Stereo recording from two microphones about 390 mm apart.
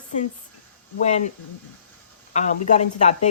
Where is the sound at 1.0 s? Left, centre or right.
Centre.